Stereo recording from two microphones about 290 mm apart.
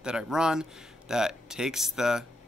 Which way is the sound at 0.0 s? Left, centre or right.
Centre.